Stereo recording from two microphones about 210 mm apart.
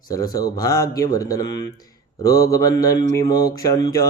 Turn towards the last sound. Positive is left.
turn(degrees=20)  # may be behind; listen again after turning